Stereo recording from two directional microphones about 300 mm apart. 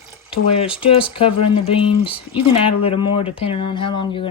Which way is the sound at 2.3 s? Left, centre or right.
Centre.